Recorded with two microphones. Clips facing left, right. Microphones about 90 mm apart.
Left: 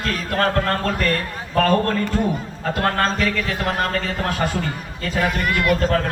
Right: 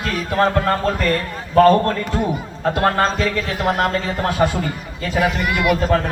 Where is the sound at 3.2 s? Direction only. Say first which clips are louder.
Right 3 dB; 20° right (ahead or behind).